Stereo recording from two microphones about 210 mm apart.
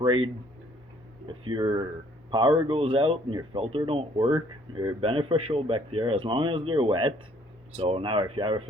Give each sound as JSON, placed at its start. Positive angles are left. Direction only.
{"t": 0.0, "sound": "speech", "side_deg": -25}
{"t": 1.3, "sound": "speech", "side_deg": -25}